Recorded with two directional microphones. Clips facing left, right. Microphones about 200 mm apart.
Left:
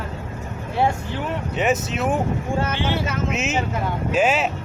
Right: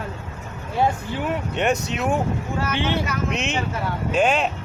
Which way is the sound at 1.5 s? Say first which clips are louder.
Left 3 dB; 5° left (ahead or behind).